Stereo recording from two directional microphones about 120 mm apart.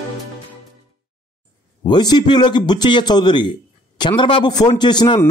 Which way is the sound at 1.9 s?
35° left (ahead or behind).